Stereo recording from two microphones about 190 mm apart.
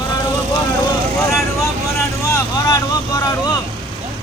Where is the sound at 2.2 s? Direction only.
20° left (ahead or behind).